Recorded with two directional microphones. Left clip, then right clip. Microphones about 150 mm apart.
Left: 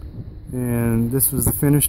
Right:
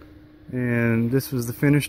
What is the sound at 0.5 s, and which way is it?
Speech, 35° left (ahead or behind).